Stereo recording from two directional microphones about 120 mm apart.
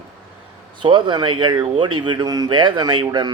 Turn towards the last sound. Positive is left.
turn(degrees=-40)  # may be behind; listen again after turning